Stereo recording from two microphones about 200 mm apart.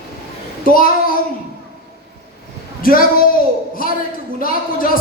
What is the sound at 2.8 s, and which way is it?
A child's voice, 45° left (ahead or behind).